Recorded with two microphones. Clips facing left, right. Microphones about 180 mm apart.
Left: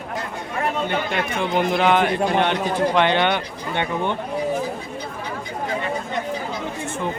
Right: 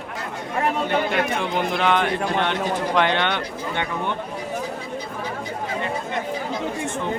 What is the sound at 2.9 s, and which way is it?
Speech, centre (ahead or behind).